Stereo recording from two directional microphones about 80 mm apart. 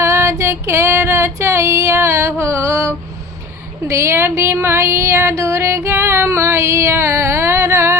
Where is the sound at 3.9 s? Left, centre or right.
Right.